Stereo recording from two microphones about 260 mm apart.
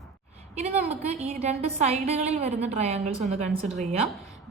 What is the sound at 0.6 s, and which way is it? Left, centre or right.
A woman's voice, right.